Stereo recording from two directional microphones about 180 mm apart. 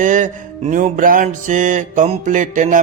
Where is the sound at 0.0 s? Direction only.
45° right (ahead or behind).